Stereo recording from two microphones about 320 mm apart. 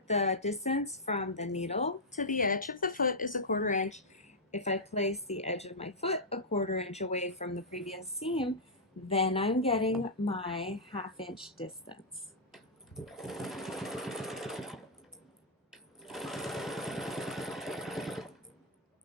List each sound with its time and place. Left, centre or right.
0.1 s speech: left
7.7 s a woman's voice: centre
8.2 s a woman's voice: centre
12.5 s lawn mower: centre